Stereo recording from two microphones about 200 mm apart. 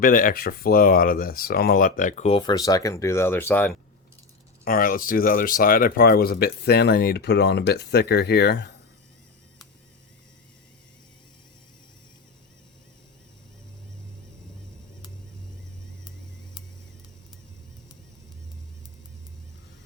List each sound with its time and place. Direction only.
0.0 s speech: 45° left (ahead or behind); by 3.8 s 10° left (ahead or behind)
4.6 s speech: 45° left (ahead or behind)